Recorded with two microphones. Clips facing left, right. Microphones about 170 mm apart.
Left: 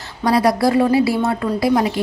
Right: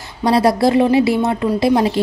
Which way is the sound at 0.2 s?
25° right (ahead or behind).